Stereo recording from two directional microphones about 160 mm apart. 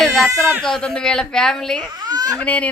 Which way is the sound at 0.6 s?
5° left (ahead or behind).